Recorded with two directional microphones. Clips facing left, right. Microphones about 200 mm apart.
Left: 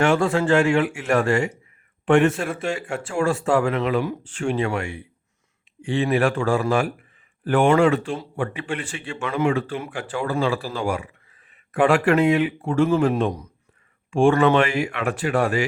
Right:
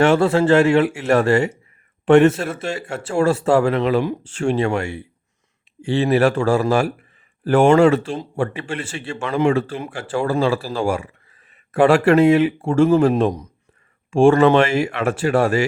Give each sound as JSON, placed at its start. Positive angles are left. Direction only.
{"t": 0.0, "sound": "speech", "side_deg": -40}